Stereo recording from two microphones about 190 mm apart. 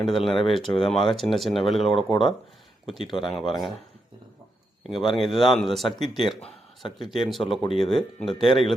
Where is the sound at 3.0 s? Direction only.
25° left (ahead or behind).